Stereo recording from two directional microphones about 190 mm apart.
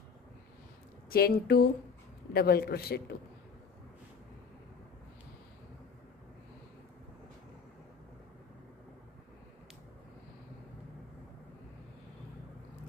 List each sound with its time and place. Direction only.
1.1 s a man's voice: 55° left (ahead or behind)